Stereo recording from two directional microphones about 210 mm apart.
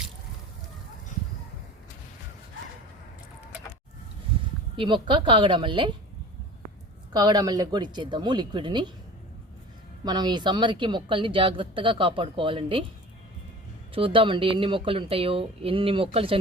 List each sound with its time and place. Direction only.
4.8 s a woman's voice: 25° right (ahead or behind)
7.1 s a woman's voice: 20° right (ahead or behind)
10.0 s a woman's voice: 20° right (ahead or behind)
13.9 s a woman's voice: 25° right (ahead or behind)